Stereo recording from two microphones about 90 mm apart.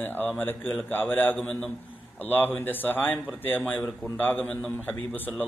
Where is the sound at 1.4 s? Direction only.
10° left (ahead or behind).